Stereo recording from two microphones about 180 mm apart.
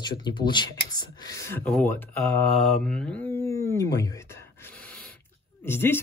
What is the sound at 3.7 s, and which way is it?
Speech, 15° left (ahead or behind).